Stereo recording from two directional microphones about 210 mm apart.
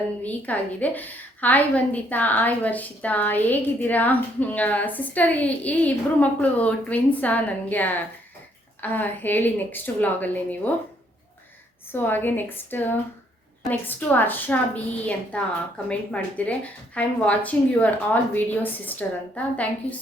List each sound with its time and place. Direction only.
0.2 s a woman's voice: 5° left (ahead or behind)
11.9 s a woman's voice: 10° left (ahead or behind)